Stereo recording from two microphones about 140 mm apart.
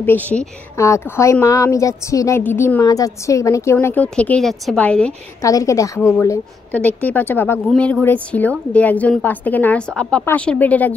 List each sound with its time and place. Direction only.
0.0 s a woman's voice: 10° left (ahead or behind)
2.8 s a woman's voice: 25° left (ahead or behind)
3.7 s a woman's voice: 10° left (ahead or behind)
5.4 s a woman's voice: 25° left (ahead or behind)
6.7 s a woman's voice: 10° left (ahead or behind)